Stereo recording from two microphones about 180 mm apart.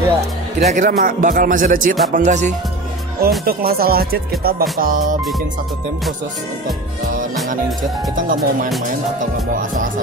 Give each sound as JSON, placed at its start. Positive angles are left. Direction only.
{"t": 0.6, "sound": "speech", "side_deg": -40}
{"t": 3.2, "sound": "speech", "side_deg": -60}
{"t": 8.4, "sound": "speech", "side_deg": 0}